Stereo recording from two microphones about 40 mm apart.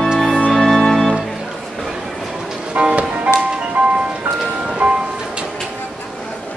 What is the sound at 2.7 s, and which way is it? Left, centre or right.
Music, right.